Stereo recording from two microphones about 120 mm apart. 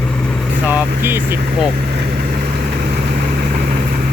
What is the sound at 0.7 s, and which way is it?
Vehicle, 15° right (ahead or behind).